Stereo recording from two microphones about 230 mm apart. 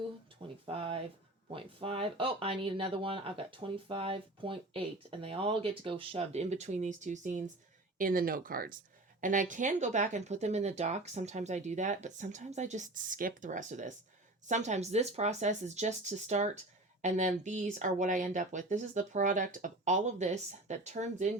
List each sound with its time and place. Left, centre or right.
0.6 s speech: right